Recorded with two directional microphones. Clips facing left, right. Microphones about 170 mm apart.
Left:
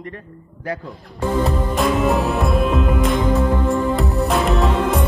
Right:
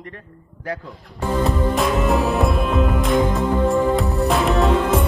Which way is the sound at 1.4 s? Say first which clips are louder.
Even; centre (ahead or behind).